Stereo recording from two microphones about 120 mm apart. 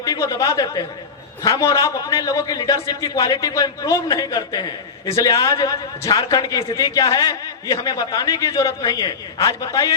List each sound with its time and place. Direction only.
0.0 s a man's voice: 30° left (ahead or behind)